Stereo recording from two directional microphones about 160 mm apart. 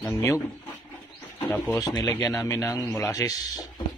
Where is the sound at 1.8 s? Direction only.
25° left (ahead or behind).